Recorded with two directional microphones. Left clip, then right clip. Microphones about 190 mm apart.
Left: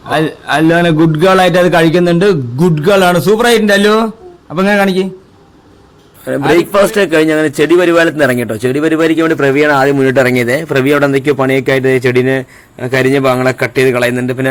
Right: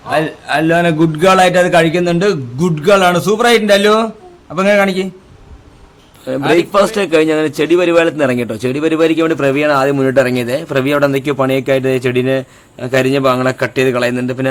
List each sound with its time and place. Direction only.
0.1 s a man's voice: 15° left (ahead or behind)
6.2 s a man's voice: 15° left (ahead or behind)